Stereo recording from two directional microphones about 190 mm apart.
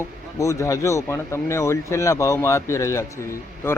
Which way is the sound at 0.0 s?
15° left (ahead or behind).